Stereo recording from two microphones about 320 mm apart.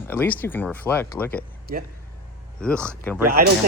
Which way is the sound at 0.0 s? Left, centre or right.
Centre.